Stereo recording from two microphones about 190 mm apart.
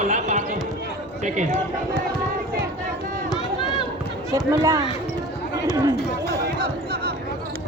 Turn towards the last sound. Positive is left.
turn(degrees=-55)  # may be behind; listen again after turning